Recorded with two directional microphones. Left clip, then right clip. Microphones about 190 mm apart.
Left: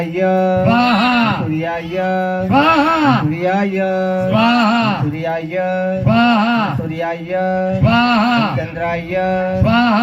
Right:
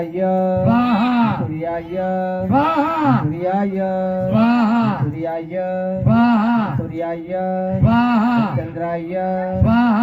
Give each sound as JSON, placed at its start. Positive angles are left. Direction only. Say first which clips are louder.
{"t": 0.3, "sound": "mantra", "louder": "left 3 dB", "side_deg": -25}
{"t": 0.6, "sound": "music", "louder": "left 4 dB", "side_deg": -45}
{"t": 2.0, "sound": "music", "louder": "left 4 dB", "side_deg": -30}
{"t": 3.8, "sound": "mantra", "louder": "left 3 dB", "side_deg": -25}
{"t": 4.3, "sound": "music", "louder": "left 5 dB", "side_deg": -45}
{"t": 5.5, "sound": "mantra", "louder": "left 4 dB", "side_deg": -40}
{"t": 7.3, "sound": "mantra", "louder": "left 5 dB", "side_deg": -30}
{"t": 7.9, "sound": "music", "louder": "left 4 dB", "side_deg": -40}